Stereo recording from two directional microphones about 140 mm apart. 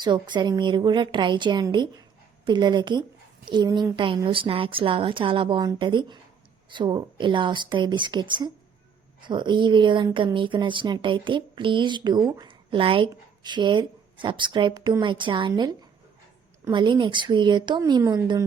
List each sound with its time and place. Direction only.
0.0 s speech: 35° right (ahead or behind)